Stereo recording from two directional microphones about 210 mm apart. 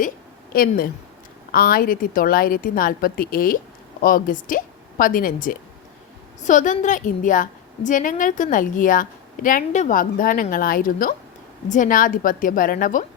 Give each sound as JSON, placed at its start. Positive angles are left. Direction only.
{"t": 0.5, "sound": "a woman's voice", "side_deg": 45}